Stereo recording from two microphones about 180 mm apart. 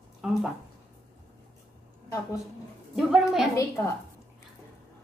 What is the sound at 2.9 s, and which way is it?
Speech, centre (ahead or behind).